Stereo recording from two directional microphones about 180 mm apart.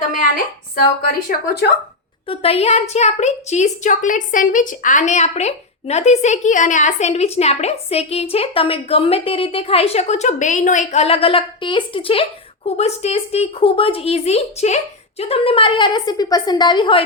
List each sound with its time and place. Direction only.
2.2 s a woman's voice: 30° left (ahead or behind)